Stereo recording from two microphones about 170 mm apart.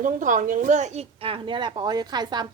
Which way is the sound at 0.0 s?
50° right (ahead or behind).